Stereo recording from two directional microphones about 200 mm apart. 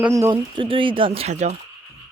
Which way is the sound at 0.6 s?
25° right (ahead or behind).